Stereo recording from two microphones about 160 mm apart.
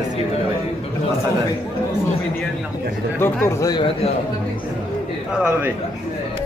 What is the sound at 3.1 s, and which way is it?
Speech, 15° left (ahead or behind).